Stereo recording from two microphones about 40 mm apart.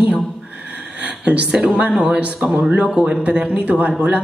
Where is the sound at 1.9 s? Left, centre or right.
Centre.